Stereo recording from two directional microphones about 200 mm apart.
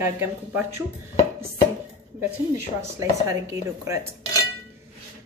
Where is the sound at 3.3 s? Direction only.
15° right (ahead or behind).